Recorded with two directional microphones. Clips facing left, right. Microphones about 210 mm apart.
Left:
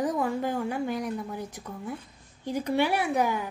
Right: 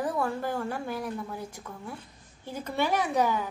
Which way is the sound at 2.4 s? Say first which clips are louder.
Left 4 dB; 15° left (ahead or behind).